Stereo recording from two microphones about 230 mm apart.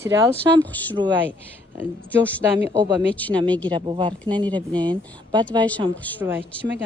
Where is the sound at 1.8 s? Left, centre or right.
Centre.